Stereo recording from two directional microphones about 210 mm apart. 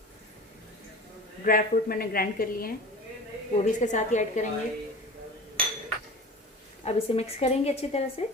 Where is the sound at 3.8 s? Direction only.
35° left (ahead or behind).